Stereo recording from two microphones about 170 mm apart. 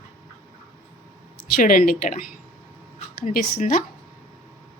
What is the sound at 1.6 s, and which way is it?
A woman's voice, 55° left (ahead or behind).